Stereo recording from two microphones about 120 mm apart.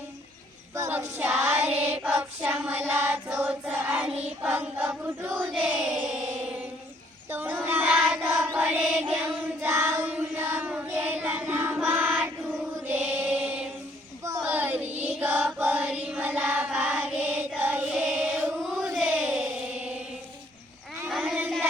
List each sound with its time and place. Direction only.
0.9 s child singing: 15° right (ahead or behind)
2.0 s choir: 10° right (ahead or behind)
7.3 s child singing: 15° right (ahead or behind)
10.1 s choir: 15° right (ahead or behind)
12.9 s mantra: 15° right (ahead or behind)
14.4 s child singing: 15° right (ahead or behind)
21.1 s a sound: centre (ahead or behind)